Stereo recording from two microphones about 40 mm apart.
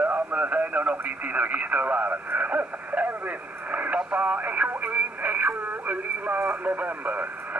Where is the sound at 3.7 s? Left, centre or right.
Right.